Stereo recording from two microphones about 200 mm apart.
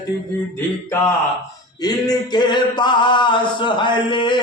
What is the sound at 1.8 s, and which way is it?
A man's voice, 20° left (ahead or behind).